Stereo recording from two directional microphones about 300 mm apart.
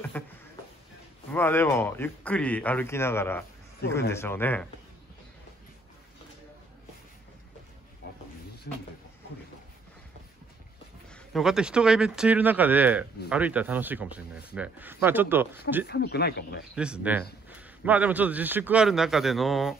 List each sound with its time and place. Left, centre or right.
0.2 s speech: centre
8.7 s speech: left
11.1 s speech: centre
15.9 s speech: left
16.7 s speech: centre